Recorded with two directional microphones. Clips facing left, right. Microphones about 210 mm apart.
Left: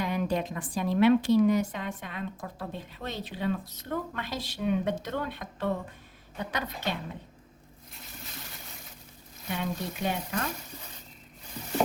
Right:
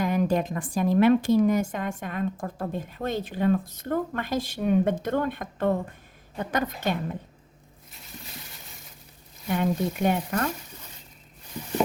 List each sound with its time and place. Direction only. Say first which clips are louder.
0.0 s a woman's voice: right 5 dB; 45° right (ahead or behind)
9.5 s a woman's voice: right 8 dB; 50° right (ahead or behind)